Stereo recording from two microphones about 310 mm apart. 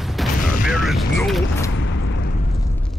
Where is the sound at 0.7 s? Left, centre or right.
Centre.